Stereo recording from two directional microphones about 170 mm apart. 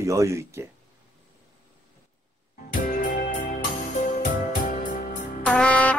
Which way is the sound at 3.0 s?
50° left (ahead or behind).